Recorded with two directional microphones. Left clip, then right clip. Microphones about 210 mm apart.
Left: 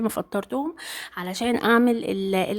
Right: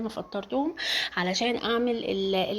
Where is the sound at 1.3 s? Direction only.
25° left (ahead or behind).